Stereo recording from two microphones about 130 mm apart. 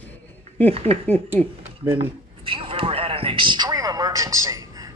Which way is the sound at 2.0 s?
45° right (ahead or behind).